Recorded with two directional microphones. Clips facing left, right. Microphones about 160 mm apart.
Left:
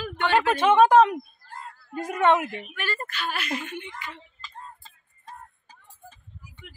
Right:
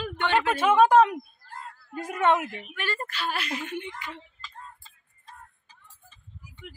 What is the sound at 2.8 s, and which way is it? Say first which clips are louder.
A woman's voice: right 1 dB; 25° right (ahead or behind).